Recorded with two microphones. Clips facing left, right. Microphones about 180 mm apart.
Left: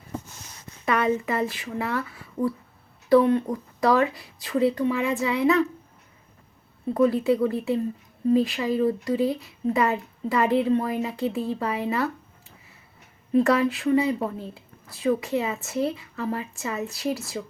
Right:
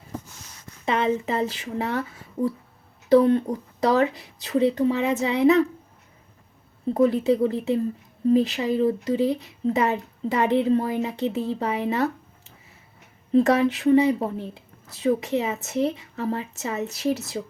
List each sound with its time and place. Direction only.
0.9 s speech: 25° right (ahead or behind)
3.2 s speech: 35° right (ahead or behind)
6.9 s speech: 25° right (ahead or behind)
13.3 s speech: 20° right (ahead or behind)